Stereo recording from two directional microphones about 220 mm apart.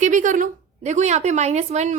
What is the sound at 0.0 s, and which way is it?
A woman's voice, 35° right (ahead or behind).